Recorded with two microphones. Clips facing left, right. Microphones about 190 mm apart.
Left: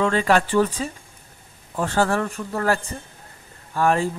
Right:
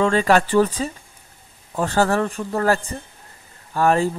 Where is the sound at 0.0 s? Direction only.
35° right (ahead or behind).